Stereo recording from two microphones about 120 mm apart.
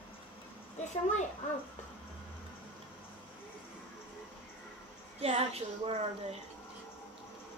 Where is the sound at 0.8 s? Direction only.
80° left.